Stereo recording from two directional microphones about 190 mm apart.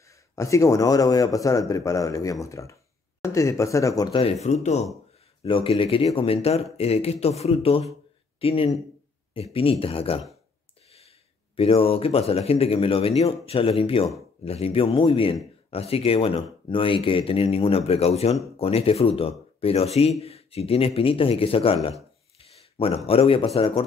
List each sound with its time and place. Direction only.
0.1 s a man's voice: 15° left (ahead or behind)